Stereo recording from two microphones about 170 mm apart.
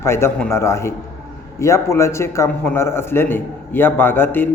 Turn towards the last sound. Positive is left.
turn(degrees=10)  # may be behind; listen again after turning